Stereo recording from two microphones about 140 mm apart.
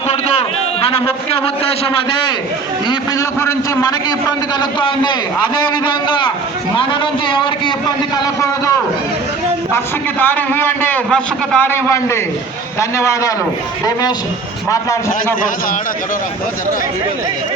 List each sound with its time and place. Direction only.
0.1 s a sound: 45° left (ahead or behind)
1.8 s a man's voice: 35° left (ahead or behind)
4.8 s a man's voice: 35° left (ahead or behind)
9.7 s a man's voice: 15° left (ahead or behind)
14.7 s a man's voice: 25° left (ahead or behind)